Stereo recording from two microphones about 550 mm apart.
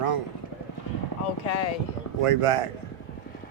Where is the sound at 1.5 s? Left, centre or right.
Left.